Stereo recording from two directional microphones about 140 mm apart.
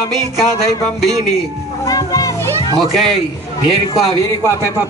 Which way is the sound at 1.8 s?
25° left (ahead or behind).